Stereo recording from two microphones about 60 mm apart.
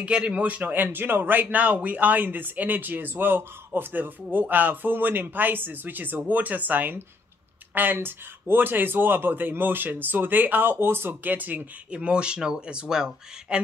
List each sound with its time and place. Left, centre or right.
0.0 s a man's voice: centre
0.8 s speech: right
11.9 s speech: centre